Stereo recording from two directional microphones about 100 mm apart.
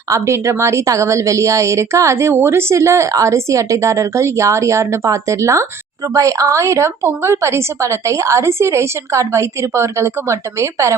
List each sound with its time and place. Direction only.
0.1 s a woman's voice: 30° right (ahead or behind)